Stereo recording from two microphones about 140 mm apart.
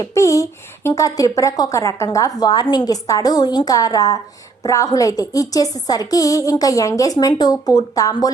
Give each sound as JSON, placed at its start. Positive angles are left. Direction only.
{"t": 0.0, "sound": "speech", "side_deg": 20}